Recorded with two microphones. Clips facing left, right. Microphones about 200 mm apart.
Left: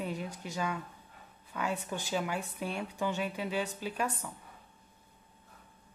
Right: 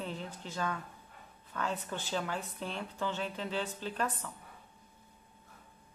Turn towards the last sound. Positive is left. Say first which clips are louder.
# left 1 dB
turn(degrees=10)  # may be behind; listen again after turning